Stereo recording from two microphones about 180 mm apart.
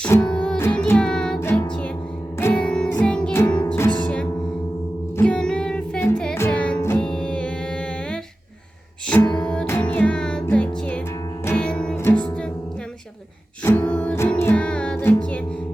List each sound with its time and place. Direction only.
0.0 s music: 10° left (ahead or behind)
9.3 s music: 5° left (ahead or behind)
13.7 s music: 10° left (ahead or behind)